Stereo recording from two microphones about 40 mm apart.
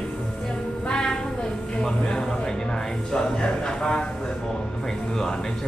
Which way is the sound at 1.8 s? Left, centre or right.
Centre.